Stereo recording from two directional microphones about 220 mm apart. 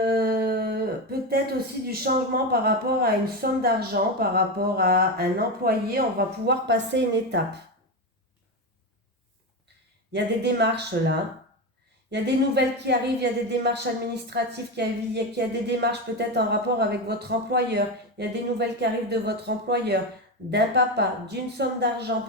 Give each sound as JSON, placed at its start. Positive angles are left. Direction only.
{"t": 0.0, "sound": "a sound", "side_deg": -45}
{"t": 2.1, "sound": "a woman's voice", "side_deg": -40}
{"t": 10.1, "sound": "a woman's voice", "side_deg": -50}
{"t": 12.1, "sound": "a woman's voice", "side_deg": -50}